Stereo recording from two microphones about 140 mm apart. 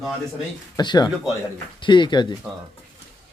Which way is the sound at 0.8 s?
30° left (ahead or behind).